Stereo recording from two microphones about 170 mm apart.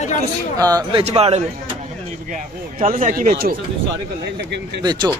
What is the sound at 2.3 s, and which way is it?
Speech, 50° right (ahead or behind).